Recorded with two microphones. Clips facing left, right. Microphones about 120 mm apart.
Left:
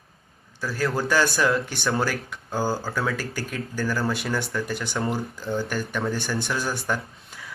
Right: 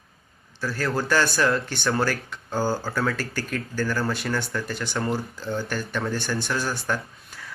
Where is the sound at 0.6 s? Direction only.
5° left (ahead or behind).